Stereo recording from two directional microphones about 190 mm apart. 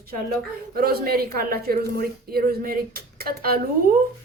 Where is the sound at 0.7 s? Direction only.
55° right (ahead or behind).